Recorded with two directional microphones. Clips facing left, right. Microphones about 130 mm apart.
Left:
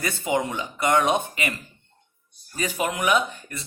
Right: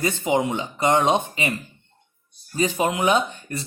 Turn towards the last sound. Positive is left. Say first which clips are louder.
# right 1 dB
turn(degrees=-30)  # may be behind; listen again after turning